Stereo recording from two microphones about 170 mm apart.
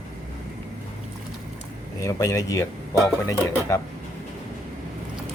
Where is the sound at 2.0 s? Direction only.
20° left (ahead or behind).